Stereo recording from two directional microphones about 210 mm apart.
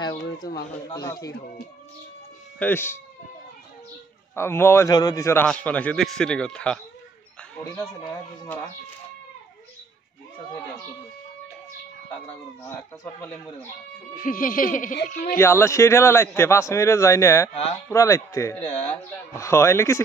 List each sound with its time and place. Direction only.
0.0 s a man's voice: 15° left (ahead or behind)
2.6 s a man's voice: 10° left (ahead or behind)
4.4 s a man's voice: 10° left (ahead or behind)
8.0 s a man's voice: 15° left (ahead or behind)
13.0 s a man's voice: 10° left (ahead or behind)
14.1 s speech: 40° left (ahead or behind)
15.3 s a man's voice: 10° left (ahead or behind)